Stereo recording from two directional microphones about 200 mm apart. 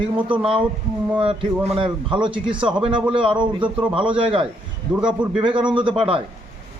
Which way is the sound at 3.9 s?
25° right (ahead or behind).